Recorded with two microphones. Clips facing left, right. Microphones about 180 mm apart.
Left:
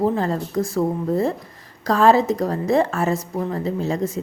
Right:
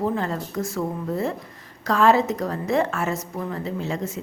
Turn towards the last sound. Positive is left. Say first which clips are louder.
# left 5 dB
turn(degrees=40)  # may be behind; listen again after turning